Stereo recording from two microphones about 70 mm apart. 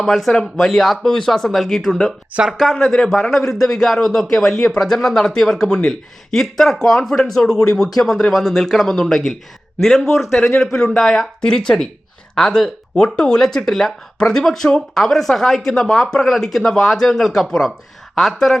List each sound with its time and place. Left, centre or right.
0.0 s a man's voice: centre
2.3 s speech: centre
2.7 s a man's voice: centre